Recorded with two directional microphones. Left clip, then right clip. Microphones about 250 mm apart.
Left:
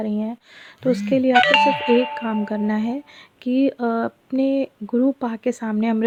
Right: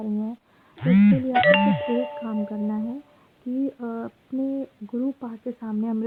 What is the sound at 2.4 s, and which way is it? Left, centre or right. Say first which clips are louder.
Speech: left 6 dB; left.